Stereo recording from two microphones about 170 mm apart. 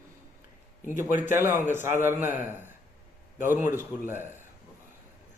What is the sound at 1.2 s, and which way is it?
Speech, 15° right (ahead or behind).